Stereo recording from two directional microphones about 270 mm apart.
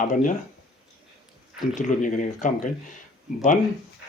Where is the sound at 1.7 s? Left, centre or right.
Left.